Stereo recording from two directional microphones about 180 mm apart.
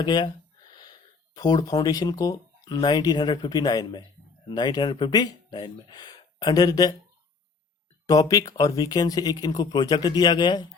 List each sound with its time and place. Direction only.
0.0 s speech: 25° left (ahead or behind)
8.0 s speech: 20° left (ahead or behind)